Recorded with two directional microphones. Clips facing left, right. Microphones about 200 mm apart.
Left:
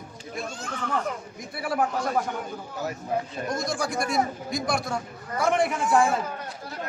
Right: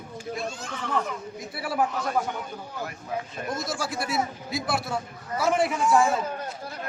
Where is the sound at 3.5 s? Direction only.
5° right (ahead or behind).